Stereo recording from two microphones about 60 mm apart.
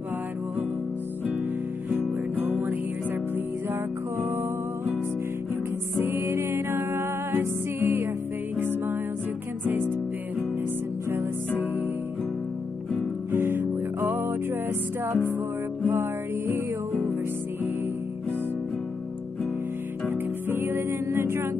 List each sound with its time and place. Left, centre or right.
1.9 s music: right
4.2 s music: right
5.9 s music: right
11.1 s music: right
13.3 s music: right
20.1 s music: right